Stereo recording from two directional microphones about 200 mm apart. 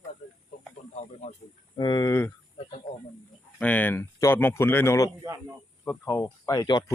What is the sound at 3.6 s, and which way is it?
Speech, 10° left (ahead or behind).